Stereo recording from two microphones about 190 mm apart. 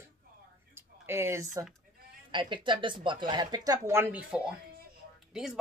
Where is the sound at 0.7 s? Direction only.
10° right (ahead or behind).